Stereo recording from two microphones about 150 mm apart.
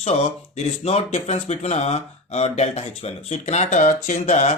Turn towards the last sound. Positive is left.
turn(degrees=50)  # may be behind; listen again after turning